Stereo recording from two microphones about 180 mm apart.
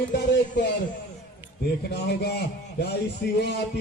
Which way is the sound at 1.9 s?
65° left (ahead or behind).